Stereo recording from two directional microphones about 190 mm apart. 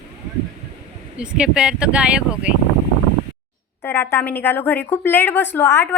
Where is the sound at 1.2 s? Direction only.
5° right (ahead or behind).